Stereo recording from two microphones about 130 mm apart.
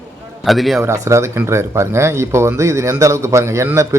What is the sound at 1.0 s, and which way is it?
Speech, 20° right (ahead or behind).